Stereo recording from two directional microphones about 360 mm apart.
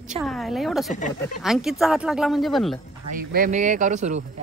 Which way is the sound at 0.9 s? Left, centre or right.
Left.